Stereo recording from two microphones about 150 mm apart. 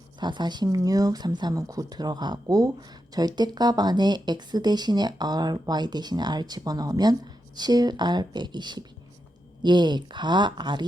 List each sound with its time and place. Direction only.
0.2 s speech: 30° right (ahead or behind)